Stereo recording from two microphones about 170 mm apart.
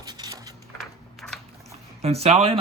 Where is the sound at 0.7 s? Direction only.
Centre (ahead or behind).